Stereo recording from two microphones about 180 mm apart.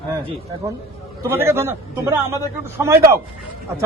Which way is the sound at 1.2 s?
15° right (ahead or behind).